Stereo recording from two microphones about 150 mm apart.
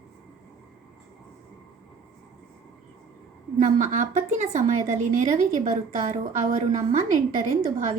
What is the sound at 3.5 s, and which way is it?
A woman's voice, 55° right (ahead or behind).